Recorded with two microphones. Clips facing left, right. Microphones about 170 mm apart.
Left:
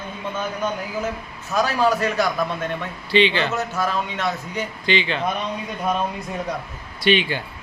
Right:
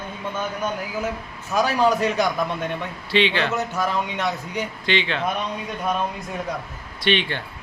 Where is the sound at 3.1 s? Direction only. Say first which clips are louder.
Left 2 dB; centre (ahead or behind).